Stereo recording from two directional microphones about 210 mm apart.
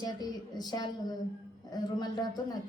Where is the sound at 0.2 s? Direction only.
20° left (ahead or behind).